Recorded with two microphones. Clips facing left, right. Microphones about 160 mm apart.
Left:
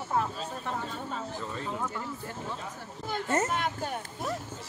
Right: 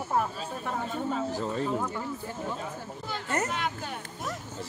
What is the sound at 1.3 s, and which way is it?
Speech, 35° right (ahead or behind).